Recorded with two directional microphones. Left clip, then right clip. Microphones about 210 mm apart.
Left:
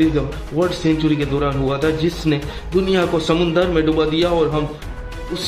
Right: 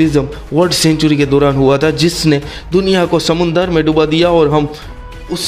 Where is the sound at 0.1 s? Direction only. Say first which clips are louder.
Right 7 dB; 50° right (ahead or behind).